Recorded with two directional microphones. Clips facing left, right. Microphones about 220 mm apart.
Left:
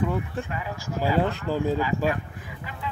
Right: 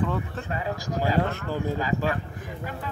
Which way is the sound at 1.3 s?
15° left (ahead or behind).